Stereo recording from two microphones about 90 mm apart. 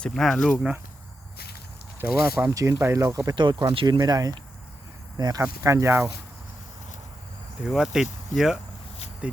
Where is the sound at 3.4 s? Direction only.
60° right (ahead or behind).